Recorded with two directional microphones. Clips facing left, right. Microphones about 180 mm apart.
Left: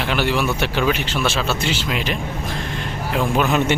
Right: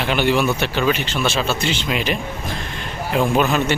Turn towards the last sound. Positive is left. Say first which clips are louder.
# right 2 dB
turn(degrees=-5)  # may be behind; listen again after turning